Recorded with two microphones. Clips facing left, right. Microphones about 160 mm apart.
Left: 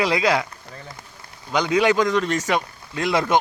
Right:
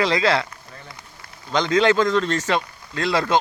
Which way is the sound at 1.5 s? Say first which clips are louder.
Right 1 dB; 10° left (ahead or behind).